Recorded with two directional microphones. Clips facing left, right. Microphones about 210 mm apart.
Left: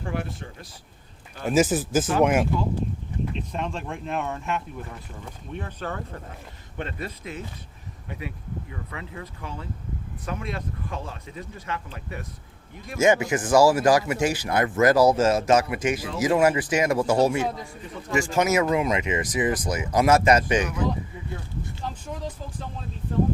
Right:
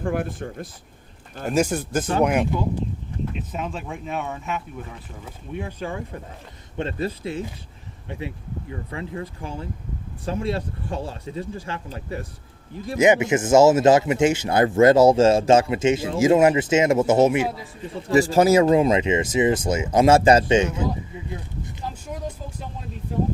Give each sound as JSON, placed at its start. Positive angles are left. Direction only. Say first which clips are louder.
{"t": 0.0, "sound": "speech", "louder": "right 6 dB", "side_deg": -50}
{"t": 1.5, "sound": "speech", "louder": "left 1 dB", "side_deg": 0}
{"t": 6.7, "sound": "speech", "louder": "right 7 dB", "side_deg": -30}
{"t": 8.7, "sound": "speech", "louder": "right 6 dB", "side_deg": -30}
{"t": 13.0, "sound": "speech", "louder": "right 3 dB", "side_deg": -20}
{"t": 17.9, "sound": "speech", "louder": "right 6 dB", "side_deg": -35}